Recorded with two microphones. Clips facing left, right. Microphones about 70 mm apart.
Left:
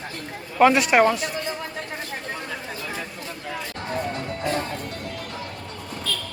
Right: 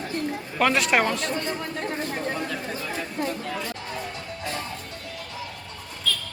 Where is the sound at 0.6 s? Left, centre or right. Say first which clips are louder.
Left 5 dB; centre.